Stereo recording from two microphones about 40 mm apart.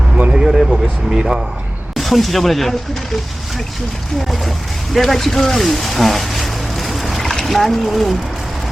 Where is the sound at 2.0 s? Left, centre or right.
Centre.